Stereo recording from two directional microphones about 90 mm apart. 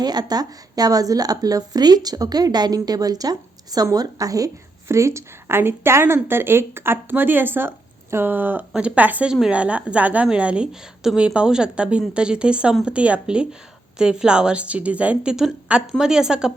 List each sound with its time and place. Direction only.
0.0 s a woman's voice: 50° right (ahead or behind); by 16.5 s 5° right (ahead or behind)